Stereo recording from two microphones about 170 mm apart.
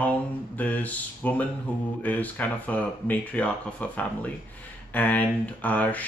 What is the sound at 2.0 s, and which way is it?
Speech, 10° left (ahead or behind).